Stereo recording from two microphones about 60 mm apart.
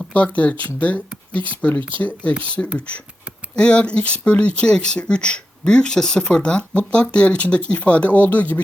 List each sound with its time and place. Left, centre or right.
0.1 s speech: left